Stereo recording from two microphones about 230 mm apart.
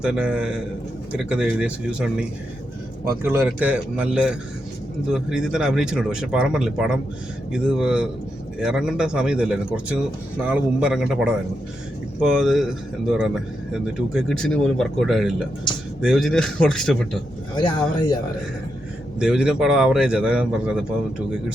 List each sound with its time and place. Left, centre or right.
0.0 s speech: centre
3.2 s speech: centre
12.2 s speech: centre
17.5 s speech: centre
19.2 s speech: centre